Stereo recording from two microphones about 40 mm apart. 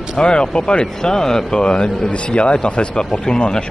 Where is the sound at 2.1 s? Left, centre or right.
Left.